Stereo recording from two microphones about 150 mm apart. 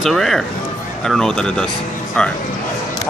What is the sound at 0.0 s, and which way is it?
Speech, centre (ahead or behind).